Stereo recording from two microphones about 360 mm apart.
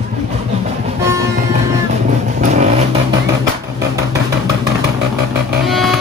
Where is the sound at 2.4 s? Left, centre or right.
Centre.